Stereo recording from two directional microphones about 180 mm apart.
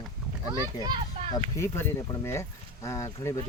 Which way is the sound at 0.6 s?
20° right (ahead or behind).